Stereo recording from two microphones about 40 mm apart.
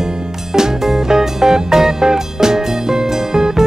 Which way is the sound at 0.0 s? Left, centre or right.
Centre.